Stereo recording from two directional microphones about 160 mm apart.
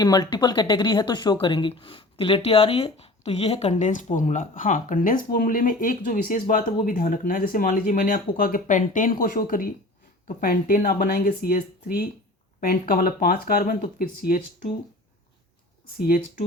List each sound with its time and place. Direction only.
0.0 s a woman's voice: 25° left (ahead or behind); by 14.4 s 70° left (ahead or behind)
16.0 s speech: 65° left (ahead or behind)